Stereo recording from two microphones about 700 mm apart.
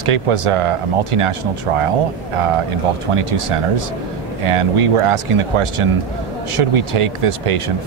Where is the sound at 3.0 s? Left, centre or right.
Right.